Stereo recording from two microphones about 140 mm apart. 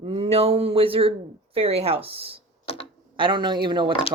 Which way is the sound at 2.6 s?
45° left (ahead or behind).